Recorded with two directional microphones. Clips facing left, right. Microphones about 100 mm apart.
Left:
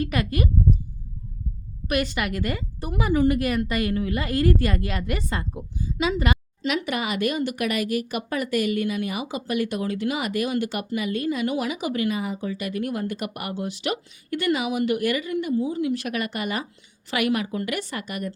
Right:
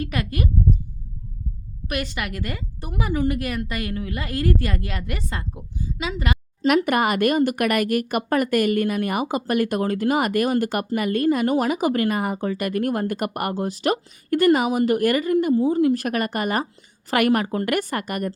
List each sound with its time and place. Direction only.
0.0 s a woman's voice: 5° left (ahead or behind)
1.9 s a woman's voice: 5° left (ahead or behind)
6.7 s speech: 50° right (ahead or behind)